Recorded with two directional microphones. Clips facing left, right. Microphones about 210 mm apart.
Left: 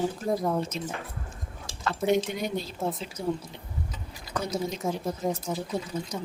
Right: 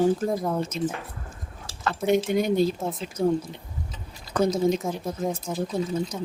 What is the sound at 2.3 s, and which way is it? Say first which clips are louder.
Speech: right 10 dB; 55° right (ahead or behind).